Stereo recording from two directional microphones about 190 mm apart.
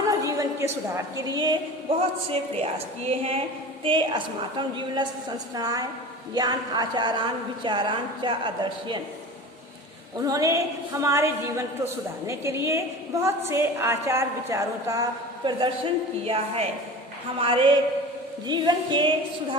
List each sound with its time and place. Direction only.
0.1 s a woman's voice: 15° right (ahead or behind)
10.2 s a woman's voice: 20° right (ahead or behind)
15.4 s a woman's voice: 25° right (ahead or behind)